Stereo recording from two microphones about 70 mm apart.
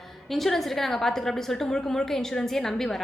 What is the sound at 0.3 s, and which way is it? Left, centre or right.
A woman's voice, centre.